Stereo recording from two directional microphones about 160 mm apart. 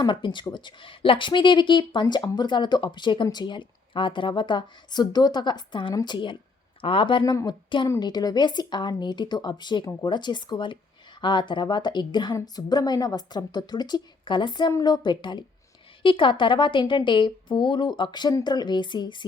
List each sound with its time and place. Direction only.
0.0 s speech: 30° left (ahead or behind)